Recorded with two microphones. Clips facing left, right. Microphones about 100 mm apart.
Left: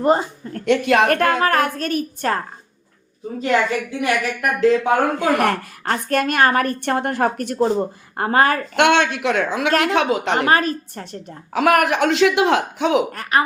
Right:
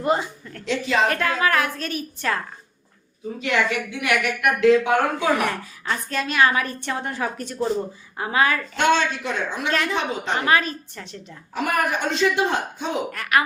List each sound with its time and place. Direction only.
0.0 s a woman's voice: 40° left (ahead or behind)
0.6 s a woman's voice: 60° left (ahead or behind); by 2.4 s 45° left (ahead or behind)
4.0 s speech: 35° left (ahead or behind)
5.2 s a woman's voice: 60° left (ahead or behind)
8.7 s speech: 70° left (ahead or behind); by 10.4 s 90° left
10.4 s a woman's voice: 45° left (ahead or behind)
11.5 s speech: 90° left
13.1 s speech: 35° left (ahead or behind)